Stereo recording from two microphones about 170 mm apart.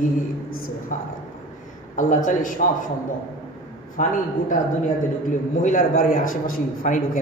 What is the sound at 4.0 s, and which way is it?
Speech, 50° left (ahead or behind).